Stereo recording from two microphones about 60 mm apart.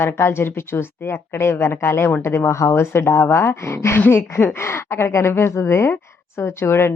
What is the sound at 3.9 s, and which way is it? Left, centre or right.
Speech, left.